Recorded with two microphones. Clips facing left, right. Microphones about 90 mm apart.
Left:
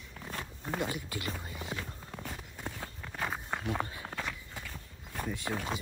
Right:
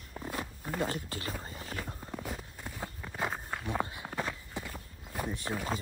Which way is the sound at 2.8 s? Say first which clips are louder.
Right 4 dB; 15° right (ahead or behind).